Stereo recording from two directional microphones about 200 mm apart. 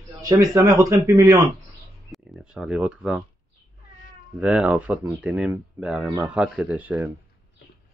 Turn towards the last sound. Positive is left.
turn(degrees=-10)  # may be behind; listen again after turning